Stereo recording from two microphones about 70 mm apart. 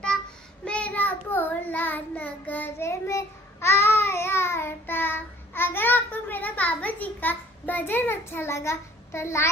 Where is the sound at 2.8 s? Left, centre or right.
Left.